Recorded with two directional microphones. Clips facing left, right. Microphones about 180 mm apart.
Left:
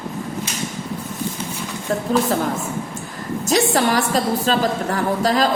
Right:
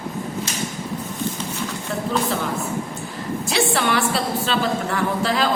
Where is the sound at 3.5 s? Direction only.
40° left (ahead or behind).